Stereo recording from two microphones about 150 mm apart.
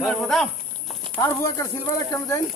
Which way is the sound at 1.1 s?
25° left (ahead or behind).